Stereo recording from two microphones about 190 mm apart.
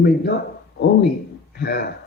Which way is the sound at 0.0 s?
60° left (ahead or behind).